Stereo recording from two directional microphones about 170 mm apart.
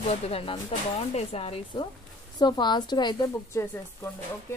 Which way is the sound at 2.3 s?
25° left (ahead or behind).